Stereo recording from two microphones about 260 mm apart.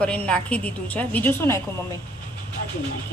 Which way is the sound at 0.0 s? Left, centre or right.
Centre.